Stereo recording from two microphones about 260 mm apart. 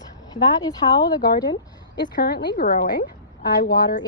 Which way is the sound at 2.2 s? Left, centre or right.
Left.